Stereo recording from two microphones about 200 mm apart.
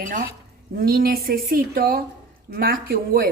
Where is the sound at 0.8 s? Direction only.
50° right (ahead or behind).